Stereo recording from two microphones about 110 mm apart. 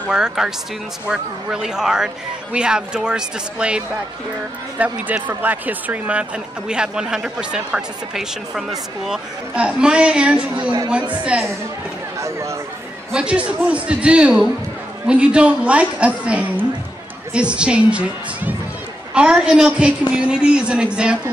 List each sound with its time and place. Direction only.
0.1 s speech: 5° right (ahead or behind)
12.2 s speech: 25° right (ahead or behind)
13.1 s speech: 10° right (ahead or behind)